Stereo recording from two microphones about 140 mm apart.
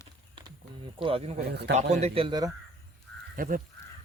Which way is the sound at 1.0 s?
40° right (ahead or behind).